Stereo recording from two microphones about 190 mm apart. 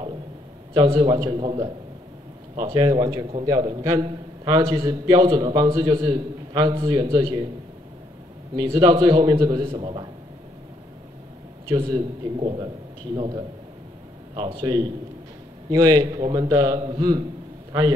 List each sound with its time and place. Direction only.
0.7 s a man's voice: 25° right (ahead or behind)
8.5 s a man's voice: 20° right (ahead or behind)
11.7 s a man's voice: 20° right (ahead or behind)